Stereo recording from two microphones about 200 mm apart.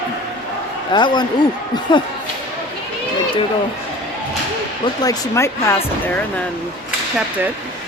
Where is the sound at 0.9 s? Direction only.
20° left (ahead or behind).